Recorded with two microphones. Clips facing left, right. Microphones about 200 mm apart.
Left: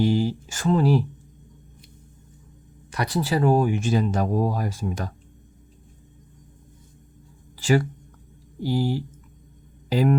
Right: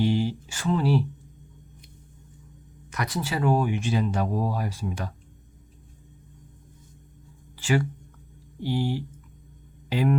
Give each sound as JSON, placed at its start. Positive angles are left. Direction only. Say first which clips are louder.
{"t": 0.0, "sound": "speech", "louder": "left 3 dB", "side_deg": 40}
{"t": 2.9, "sound": "speech", "louder": "left 5 dB", "side_deg": 35}
{"t": 7.5, "sound": "speech", "louder": "left 4 dB", "side_deg": 40}